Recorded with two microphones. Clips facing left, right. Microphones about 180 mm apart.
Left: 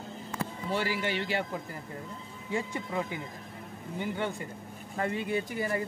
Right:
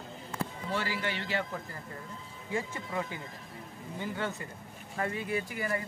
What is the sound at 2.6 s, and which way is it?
A man's voice, 20° left (ahead or behind).